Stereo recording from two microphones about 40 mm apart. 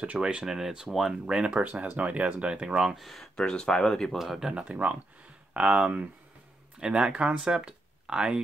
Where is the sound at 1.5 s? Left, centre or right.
Right; by 3.0 s centre.